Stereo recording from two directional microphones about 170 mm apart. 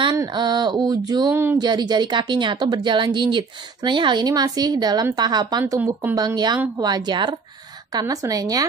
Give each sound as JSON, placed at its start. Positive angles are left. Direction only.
{"t": 0.0, "sound": "speech", "side_deg": -25}
{"t": 1.6, "sound": "speech", "side_deg": -25}